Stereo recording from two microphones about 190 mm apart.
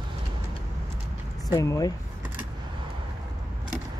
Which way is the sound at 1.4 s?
15° left (ahead or behind).